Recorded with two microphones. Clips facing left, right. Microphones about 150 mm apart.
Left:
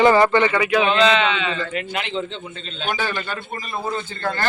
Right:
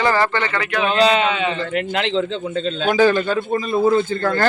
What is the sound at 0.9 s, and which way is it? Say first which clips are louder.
Speech: right 1 dB; 40° right (ahead or behind).